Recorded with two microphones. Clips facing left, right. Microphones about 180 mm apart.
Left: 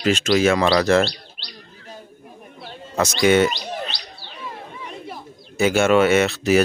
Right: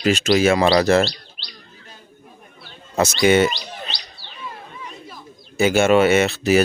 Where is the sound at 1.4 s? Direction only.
55° left (ahead or behind).